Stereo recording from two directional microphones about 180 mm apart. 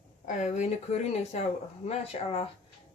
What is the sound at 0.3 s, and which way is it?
Speech, 40° left (ahead or behind).